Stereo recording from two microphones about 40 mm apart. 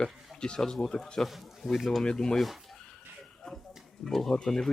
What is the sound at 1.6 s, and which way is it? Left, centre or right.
Speech, centre.